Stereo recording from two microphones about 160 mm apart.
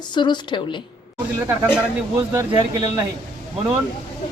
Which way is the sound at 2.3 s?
15° right (ahead or behind).